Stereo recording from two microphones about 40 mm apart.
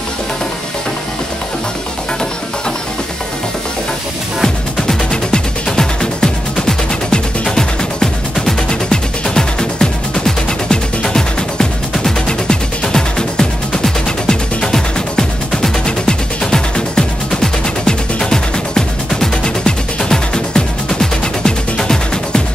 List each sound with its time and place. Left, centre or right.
5.1 s music: centre